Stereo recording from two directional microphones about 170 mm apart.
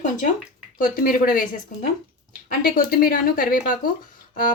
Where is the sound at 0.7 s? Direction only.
55° left (ahead or behind).